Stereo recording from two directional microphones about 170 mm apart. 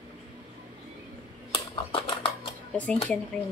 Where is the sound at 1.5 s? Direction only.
30° left (ahead or behind).